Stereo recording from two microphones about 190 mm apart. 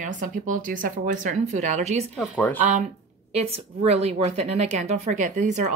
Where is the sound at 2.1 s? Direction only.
5° left (ahead or behind).